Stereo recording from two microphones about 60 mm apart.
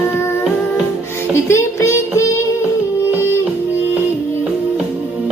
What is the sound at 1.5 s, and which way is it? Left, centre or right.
Child singing, left.